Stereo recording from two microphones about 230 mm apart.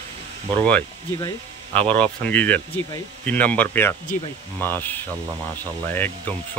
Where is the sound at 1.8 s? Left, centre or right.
Right.